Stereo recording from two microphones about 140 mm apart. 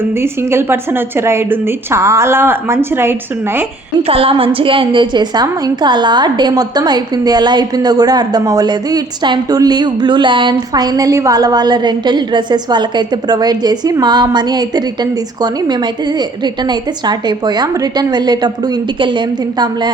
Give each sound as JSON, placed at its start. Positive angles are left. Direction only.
{"t": 0.2, "sound": "a woman's voice", "side_deg": -15}
{"t": 4.1, "sound": "a woman's voice", "side_deg": -40}
{"t": 16.1, "sound": "a woman's voice", "side_deg": -30}